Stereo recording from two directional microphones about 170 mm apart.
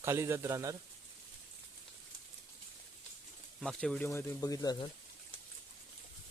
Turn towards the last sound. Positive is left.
turn(degrees=20)  # may be behind; listen again after turning